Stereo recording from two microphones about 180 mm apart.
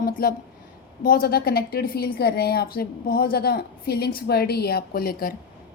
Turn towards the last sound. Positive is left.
turn(degrees=55)  # may be behind; listen again after turning